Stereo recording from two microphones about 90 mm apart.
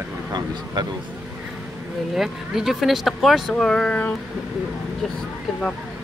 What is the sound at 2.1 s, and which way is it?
Speech, 5° right (ahead or behind).